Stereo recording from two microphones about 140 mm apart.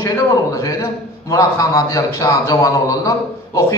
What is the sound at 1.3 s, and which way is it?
A man's voice, 25° left (ahead or behind).